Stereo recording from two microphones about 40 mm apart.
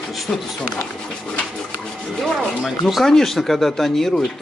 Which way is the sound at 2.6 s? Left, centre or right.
Centre.